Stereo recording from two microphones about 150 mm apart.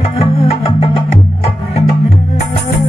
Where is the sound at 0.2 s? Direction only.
40° left (ahead or behind).